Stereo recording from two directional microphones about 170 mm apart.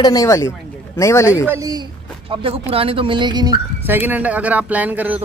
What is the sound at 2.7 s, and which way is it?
Speech, 35° right (ahead or behind).